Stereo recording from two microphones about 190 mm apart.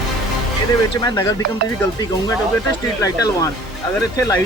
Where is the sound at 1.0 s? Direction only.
20° left (ahead or behind).